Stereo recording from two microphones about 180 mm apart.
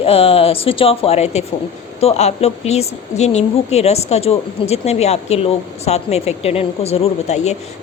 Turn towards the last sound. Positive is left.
turn(degrees=40)  # may be behind; listen again after turning